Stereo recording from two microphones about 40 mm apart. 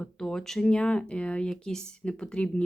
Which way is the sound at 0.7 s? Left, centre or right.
Left.